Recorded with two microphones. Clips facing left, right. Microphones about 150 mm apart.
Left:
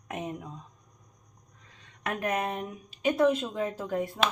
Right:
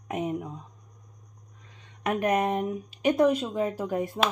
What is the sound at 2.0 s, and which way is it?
Speech, 15° right (ahead or behind).